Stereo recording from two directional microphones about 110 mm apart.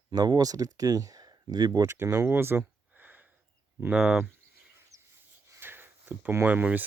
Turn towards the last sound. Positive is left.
turn(degrees=-15)  # may be behind; listen again after turning